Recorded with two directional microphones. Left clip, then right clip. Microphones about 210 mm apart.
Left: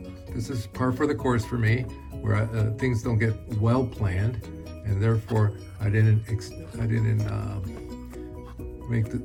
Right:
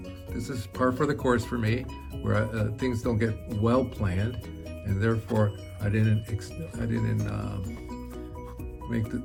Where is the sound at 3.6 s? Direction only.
90° right.